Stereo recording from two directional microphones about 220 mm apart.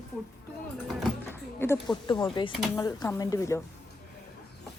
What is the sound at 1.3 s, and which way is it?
Speech, 10° left (ahead or behind).